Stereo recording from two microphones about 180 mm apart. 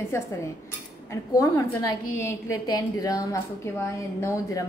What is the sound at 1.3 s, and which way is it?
A woman's voice, 20° left (ahead or behind).